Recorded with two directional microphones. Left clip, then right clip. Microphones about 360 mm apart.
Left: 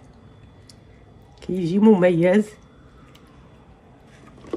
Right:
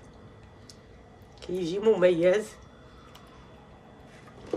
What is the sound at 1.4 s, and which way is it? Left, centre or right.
Speech, centre.